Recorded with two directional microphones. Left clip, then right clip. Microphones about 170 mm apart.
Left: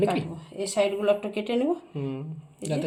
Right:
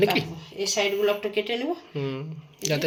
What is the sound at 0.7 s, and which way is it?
A woman's voice, 50° left (ahead or behind).